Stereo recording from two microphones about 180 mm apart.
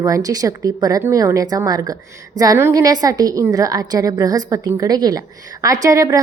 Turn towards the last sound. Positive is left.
turn(degrees=-20)  # may be behind; listen again after turning